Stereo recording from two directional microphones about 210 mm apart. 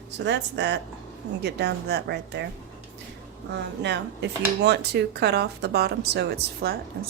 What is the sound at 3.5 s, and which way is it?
Speech, 55° right (ahead or behind).